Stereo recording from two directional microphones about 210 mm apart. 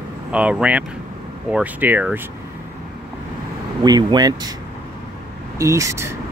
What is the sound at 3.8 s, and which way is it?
Speech, 20° right (ahead or behind).